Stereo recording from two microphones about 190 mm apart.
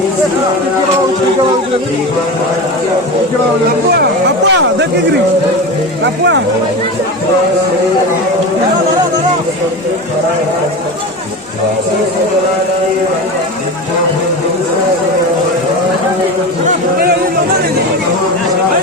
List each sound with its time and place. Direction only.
3.9 s speech: 65° right (ahead or behind)